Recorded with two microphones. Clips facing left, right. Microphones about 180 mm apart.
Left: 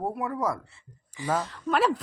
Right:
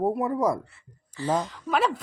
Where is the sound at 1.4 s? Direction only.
Centre (ahead or behind).